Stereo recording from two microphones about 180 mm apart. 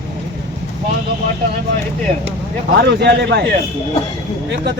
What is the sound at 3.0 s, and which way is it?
Speech, 65° right (ahead or behind).